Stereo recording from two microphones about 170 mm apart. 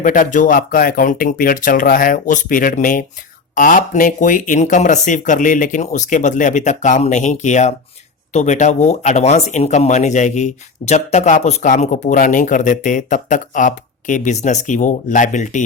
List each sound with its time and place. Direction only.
0.0 s speech: 50° left (ahead or behind)